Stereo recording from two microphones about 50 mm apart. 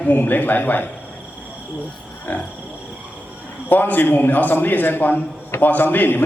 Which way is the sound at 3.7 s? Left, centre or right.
Left.